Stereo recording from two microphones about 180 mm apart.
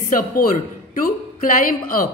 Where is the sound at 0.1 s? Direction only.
50° left (ahead or behind).